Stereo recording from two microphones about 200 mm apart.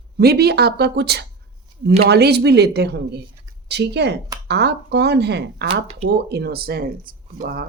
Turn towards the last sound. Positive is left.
turn(degrees=-45)  # may be behind; listen again after turning